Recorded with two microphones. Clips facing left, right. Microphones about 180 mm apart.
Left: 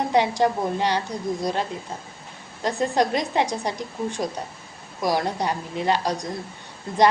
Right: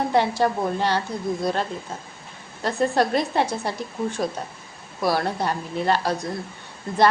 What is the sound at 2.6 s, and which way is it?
A woman's voice, 15° left (ahead or behind).